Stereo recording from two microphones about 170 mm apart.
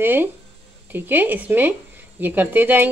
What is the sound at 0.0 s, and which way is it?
Speech, 10° right (ahead or behind).